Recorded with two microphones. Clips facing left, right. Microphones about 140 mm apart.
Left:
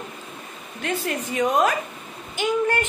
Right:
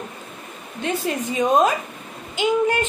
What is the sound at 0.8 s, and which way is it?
Speech, 20° right (ahead or behind).